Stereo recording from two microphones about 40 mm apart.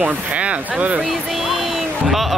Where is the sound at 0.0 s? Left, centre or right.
Right.